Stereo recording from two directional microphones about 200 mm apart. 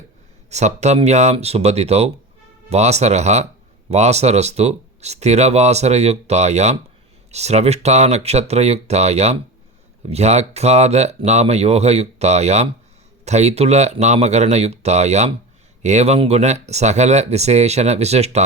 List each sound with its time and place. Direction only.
0.5 s speech: 35° right (ahead or behind)